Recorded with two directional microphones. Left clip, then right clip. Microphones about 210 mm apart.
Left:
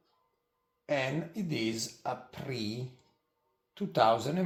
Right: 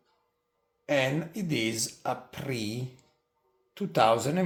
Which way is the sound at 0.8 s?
25° right (ahead or behind).